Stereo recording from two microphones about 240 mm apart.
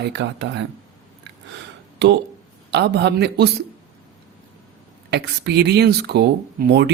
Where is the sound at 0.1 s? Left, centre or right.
Right.